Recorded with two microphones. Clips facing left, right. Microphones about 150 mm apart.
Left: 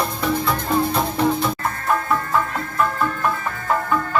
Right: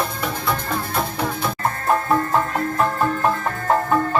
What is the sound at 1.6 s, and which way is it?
Music, 35° right (ahead or behind).